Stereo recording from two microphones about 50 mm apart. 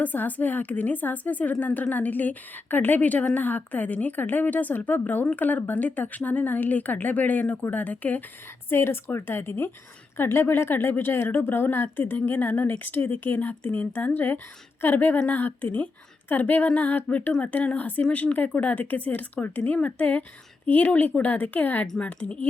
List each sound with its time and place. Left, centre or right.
0.0 s a woman's voice: left
8.7 s a woman's voice: left